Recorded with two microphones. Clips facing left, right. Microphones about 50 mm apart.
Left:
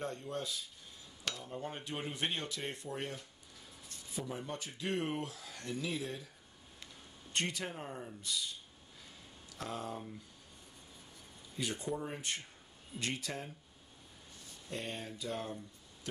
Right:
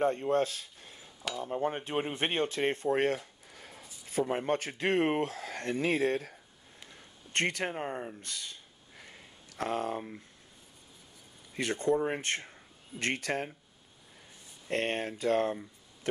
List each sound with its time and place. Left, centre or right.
0.0 s speech: right
1.4 s speech: right
3.5 s a sound: right
4.1 s speech: right
7.3 s speech: right
8.2 s a sound: right
11.5 s speech: right
14.7 s speech: right